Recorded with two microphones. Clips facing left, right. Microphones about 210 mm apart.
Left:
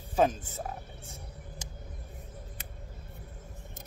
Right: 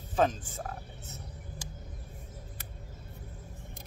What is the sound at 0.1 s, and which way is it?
Wild animals, 10° left (ahead or behind).